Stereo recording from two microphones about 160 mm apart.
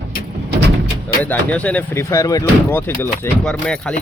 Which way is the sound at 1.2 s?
10° left (ahead or behind).